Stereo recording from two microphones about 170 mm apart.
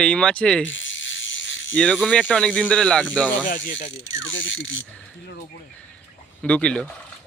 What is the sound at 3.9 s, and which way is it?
Speech, 90° left.